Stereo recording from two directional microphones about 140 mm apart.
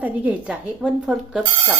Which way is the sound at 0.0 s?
10° right (ahead or behind).